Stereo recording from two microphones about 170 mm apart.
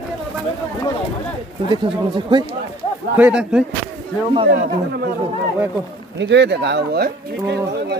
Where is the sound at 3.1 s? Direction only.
5° right (ahead or behind).